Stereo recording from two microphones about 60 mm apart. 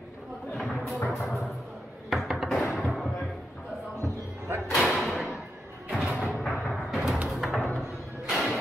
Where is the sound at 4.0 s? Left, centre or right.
Right.